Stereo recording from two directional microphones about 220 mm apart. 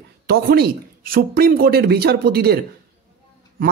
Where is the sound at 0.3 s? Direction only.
45° right (ahead or behind).